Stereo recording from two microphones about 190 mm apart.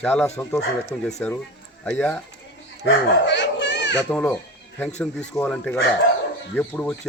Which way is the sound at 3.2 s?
70° left (ahead or behind).